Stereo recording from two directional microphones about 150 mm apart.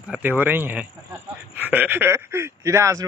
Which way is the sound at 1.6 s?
10° right (ahead or behind).